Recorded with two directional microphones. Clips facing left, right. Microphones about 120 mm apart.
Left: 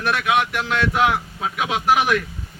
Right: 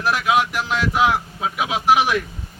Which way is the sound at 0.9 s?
5° right (ahead or behind).